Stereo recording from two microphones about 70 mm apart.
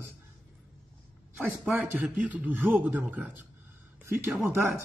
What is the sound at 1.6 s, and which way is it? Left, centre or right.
A man's voice, right.